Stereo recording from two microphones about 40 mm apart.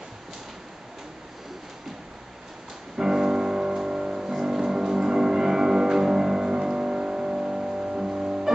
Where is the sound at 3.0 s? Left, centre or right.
Centre.